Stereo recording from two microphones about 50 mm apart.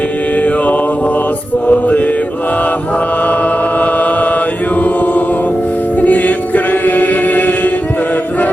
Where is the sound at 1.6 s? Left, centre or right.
Left.